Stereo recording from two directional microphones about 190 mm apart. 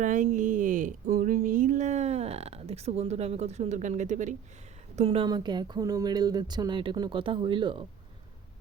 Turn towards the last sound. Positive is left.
turn(degrees=-25)  # may be behind; listen again after turning